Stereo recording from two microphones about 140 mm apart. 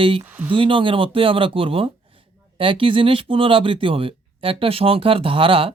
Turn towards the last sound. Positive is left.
turn(degrees=-40)  # may be behind; listen again after turning